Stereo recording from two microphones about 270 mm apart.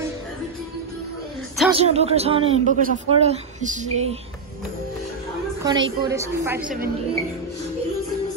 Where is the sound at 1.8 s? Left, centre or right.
Right.